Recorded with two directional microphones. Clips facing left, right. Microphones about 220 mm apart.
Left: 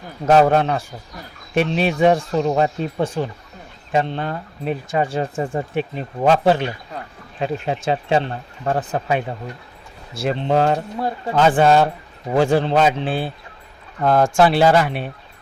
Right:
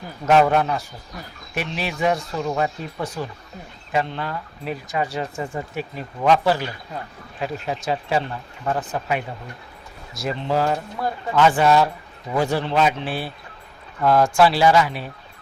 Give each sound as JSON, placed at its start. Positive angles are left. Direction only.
{"t": 0.3, "sound": "speech", "side_deg": 35}
{"t": 10.2, "sound": "speech", "side_deg": 25}
{"t": 14.0, "sound": "speech", "side_deg": 45}
{"t": 14.4, "sound": "speech", "side_deg": 55}